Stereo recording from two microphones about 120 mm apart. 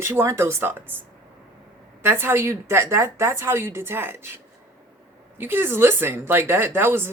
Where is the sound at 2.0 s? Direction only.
20° right (ahead or behind).